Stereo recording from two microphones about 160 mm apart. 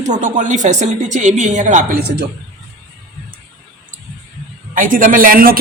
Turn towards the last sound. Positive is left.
turn(degrees=-65)  # may be behind; listen again after turning